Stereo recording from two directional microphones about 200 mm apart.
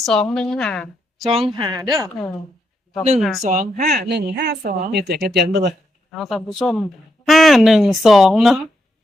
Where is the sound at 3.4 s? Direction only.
35° right (ahead or behind); by 5.7 s 55° right (ahead or behind).